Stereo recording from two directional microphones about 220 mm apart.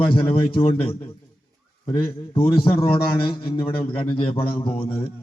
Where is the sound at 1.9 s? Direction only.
25° left (ahead or behind).